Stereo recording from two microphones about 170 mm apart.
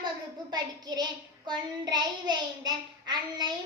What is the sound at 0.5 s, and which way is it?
Child singing, 25° right (ahead or behind).